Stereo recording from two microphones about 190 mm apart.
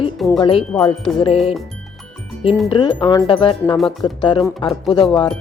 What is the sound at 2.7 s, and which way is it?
Speech, 25° left (ahead or behind).